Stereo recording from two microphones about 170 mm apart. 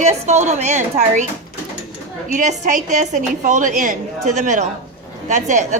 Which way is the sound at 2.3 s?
45° right (ahead or behind).